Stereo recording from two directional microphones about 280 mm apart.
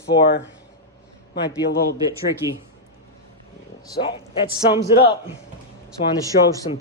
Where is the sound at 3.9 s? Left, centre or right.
Centre.